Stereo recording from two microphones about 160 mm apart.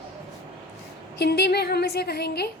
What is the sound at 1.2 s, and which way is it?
A woman's voice, 90° left.